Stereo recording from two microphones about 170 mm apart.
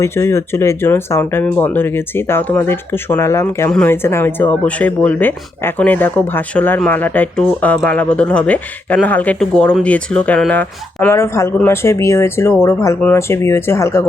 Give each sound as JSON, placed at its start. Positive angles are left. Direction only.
{"t": 0.0, "sound": "speech", "side_deg": 15}